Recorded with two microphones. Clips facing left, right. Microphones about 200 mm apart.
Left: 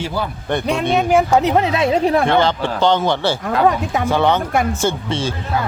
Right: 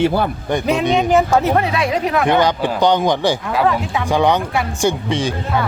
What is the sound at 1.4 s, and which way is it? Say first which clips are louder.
Speech: left 1 dB; 20° left (ahead or behind).